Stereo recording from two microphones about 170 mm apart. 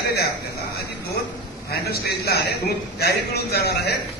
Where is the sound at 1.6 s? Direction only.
70° left (ahead or behind).